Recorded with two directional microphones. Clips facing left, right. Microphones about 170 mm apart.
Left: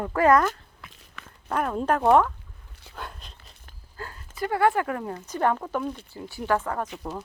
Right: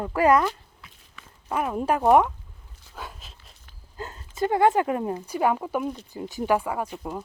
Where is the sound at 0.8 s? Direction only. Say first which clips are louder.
Left 3 dB; 60° left (ahead or behind).